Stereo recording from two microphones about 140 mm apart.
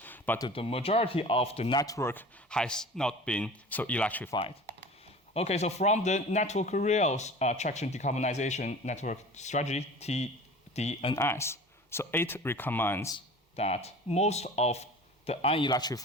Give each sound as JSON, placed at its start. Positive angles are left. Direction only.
{"t": 0.0, "sound": "a sound", "side_deg": 15}
{"t": 0.5, "sound": "speech", "side_deg": 40}
{"t": 1.7, "sound": "speech", "side_deg": 25}
{"t": 2.5, "sound": "speech", "side_deg": 5}
{"t": 5.3, "sound": "speech", "side_deg": 50}
{"t": 11.1, "sound": "speech", "side_deg": 20}
{"t": 13.6, "sound": "speech", "side_deg": 50}
{"t": 15.7, "sound": "speech", "side_deg": 30}